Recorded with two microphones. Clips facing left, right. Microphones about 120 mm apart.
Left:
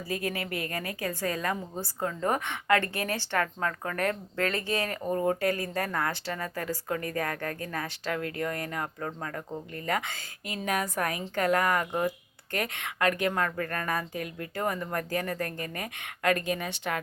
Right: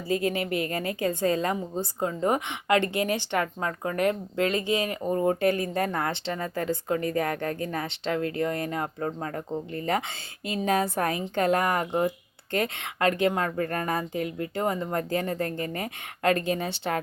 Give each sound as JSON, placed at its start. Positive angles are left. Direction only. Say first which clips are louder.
{"t": 0.1, "sound": "a woman's voice", "louder": "right 7 dB", "side_deg": -25}